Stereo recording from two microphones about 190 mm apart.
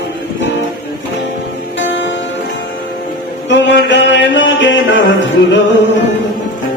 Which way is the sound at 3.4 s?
70° left (ahead or behind).